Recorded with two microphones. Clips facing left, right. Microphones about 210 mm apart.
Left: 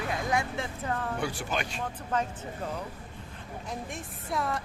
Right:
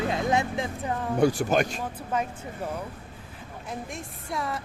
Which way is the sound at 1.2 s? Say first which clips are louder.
Right 10 dB; 40° right (ahead or behind).